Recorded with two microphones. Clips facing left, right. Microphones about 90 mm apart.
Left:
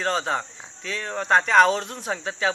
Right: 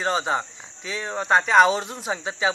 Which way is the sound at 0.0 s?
5° right (ahead or behind).